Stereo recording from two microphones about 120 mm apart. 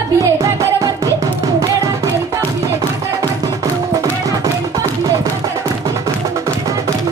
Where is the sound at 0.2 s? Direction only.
30° right (ahead or behind).